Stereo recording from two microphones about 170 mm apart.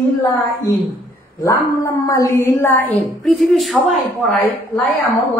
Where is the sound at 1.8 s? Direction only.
20° left (ahead or behind).